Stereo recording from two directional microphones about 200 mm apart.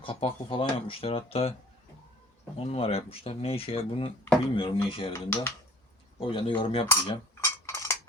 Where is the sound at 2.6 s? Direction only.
30° left (ahead or behind).